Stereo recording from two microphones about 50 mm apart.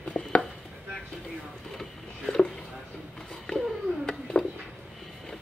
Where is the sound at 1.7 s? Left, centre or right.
Centre.